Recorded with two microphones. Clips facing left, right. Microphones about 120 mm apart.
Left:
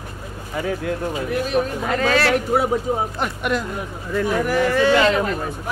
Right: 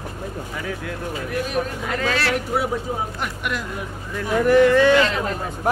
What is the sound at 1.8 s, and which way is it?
Speech, 50° left (ahead or behind).